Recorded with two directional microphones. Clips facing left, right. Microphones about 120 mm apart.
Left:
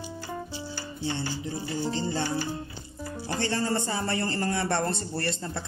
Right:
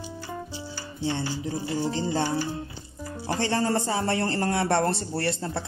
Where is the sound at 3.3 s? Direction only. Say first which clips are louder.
Right 3 dB; 90° right.